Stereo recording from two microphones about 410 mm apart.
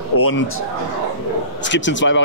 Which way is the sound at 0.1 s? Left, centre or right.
Left.